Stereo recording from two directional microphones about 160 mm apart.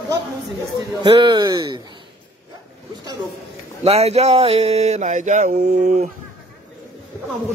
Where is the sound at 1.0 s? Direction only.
30° right (ahead or behind).